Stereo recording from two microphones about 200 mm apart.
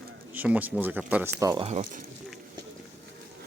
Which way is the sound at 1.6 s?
35° right (ahead or behind).